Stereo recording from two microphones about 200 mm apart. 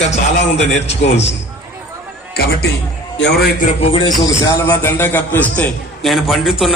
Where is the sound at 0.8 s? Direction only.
35° left (ahead or behind).